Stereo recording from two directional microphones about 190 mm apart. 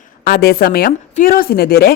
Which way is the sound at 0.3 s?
55° left (ahead or behind).